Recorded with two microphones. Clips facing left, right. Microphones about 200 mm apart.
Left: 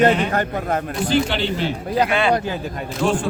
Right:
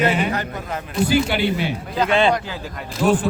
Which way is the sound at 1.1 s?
10° right (ahead or behind).